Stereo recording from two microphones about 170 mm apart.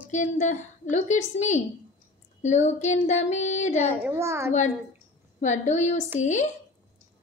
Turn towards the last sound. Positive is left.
turn(degrees=45)  # may be behind; listen again after turning